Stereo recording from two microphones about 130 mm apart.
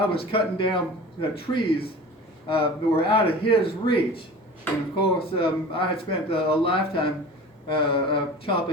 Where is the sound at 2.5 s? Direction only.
45° left (ahead or behind).